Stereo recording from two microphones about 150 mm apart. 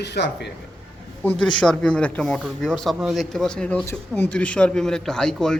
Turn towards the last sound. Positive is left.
turn(degrees=5)  # may be behind; listen again after turning